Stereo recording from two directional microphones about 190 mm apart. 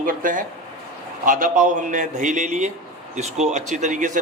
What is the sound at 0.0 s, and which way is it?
A man's voice, 45° right (ahead or behind).